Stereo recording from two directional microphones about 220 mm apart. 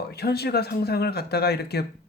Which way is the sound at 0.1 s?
45° left (ahead or behind).